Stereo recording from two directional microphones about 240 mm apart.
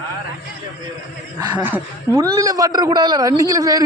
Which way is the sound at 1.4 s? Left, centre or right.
Centre.